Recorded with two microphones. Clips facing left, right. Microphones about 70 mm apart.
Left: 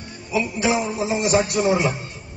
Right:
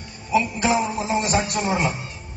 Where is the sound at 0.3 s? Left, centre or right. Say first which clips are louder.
Right 1 dB; right.